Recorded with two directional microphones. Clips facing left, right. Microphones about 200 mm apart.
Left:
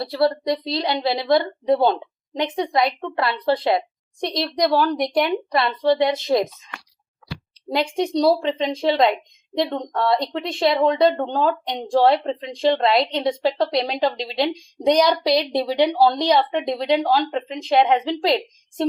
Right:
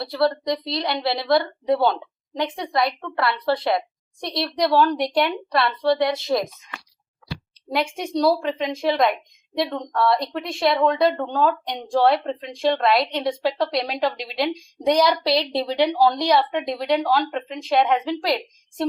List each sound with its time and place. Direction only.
0.2 s a woman's voice: 25° left (ahead or behind)
8.2 s a woman's voice: 25° left (ahead or behind)